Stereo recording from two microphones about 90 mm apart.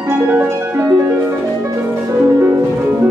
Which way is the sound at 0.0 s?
20° right (ahead or behind).